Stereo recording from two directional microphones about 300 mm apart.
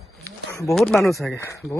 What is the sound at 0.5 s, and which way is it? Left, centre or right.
Speech, centre.